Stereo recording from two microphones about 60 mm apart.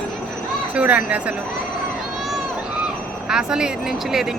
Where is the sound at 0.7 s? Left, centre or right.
Centre.